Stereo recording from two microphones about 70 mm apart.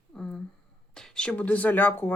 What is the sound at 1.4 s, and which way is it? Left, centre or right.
Speech, left.